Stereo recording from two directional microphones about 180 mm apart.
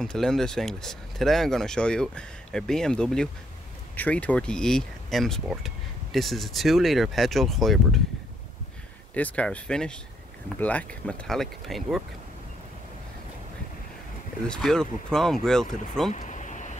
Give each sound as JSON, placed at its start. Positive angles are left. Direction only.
{"t": 0.0, "sound": "speech", "side_deg": 5}
{"t": 9.1, "sound": "speech", "side_deg": 10}
{"t": 14.4, "sound": "speech", "side_deg": 5}
{"t": 16.1, "sound": "vehicle", "side_deg": 40}